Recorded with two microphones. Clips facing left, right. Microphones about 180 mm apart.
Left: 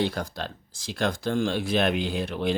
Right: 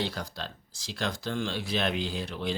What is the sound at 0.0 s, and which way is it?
Speech, 50° left (ahead or behind).